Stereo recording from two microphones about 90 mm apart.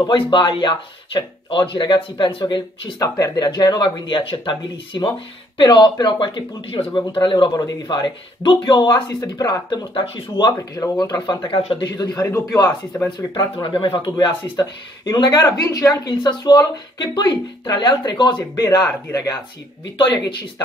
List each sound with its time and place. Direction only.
0.1 s speech: 65° left (ahead or behind)
3.0 s speech: 40° left (ahead or behind); by 7.0 s 80° left
7.0 s speech: 60° left (ahead or behind)
9.9 s speech: 75° left (ahead or behind)
11.0 s speech: 45° left (ahead or behind)
11.5 s speech: 60° left (ahead or behind)
12.2 s a man's voice: 30° left (ahead or behind)
12.5 s speech: 45° left (ahead or behind)
13.7 s speech: 65° left (ahead or behind)
14.1 s a man's voice: 50° left (ahead or behind)